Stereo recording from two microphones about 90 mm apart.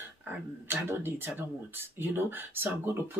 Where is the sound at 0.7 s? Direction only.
25° right (ahead or behind).